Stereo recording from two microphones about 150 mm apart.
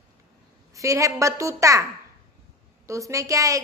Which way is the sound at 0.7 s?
20° right (ahead or behind).